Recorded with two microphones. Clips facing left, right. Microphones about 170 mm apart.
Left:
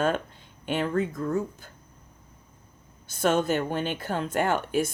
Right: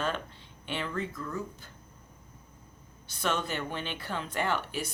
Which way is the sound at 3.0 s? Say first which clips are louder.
Left 8 dB; 45° left (ahead or behind).